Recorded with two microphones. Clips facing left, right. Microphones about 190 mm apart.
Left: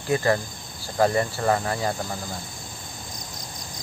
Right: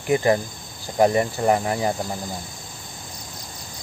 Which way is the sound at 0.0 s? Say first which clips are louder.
Right 3 dB; 20° right (ahead or behind).